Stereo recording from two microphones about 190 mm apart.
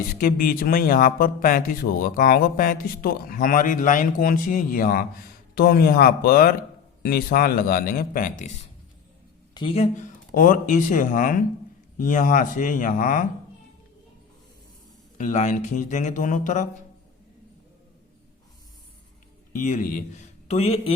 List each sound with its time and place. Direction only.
0.2 s speech: 50° left (ahead or behind)
9.6 s speech: 30° left (ahead or behind)
10.3 s speech: 45° left (ahead or behind)
15.2 s speech: 40° left (ahead or behind)
19.5 s a man's voice: 40° left (ahead or behind)